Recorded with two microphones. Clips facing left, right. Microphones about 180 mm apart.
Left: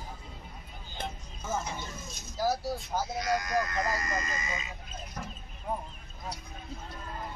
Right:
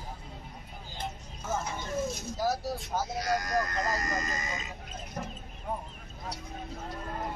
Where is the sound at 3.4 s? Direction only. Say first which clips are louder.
Even; 40° right (ahead or behind).